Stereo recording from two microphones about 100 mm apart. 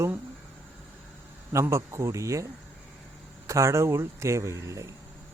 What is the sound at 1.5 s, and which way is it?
Speech, 30° right (ahead or behind).